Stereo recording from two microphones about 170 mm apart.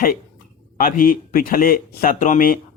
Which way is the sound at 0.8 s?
55° left (ahead or behind).